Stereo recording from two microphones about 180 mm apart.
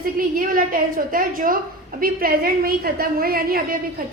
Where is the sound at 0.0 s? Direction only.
50° right (ahead or behind).